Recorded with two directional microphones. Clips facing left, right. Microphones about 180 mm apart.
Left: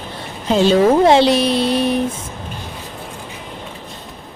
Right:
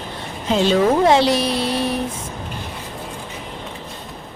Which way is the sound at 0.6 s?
25° left (ahead or behind).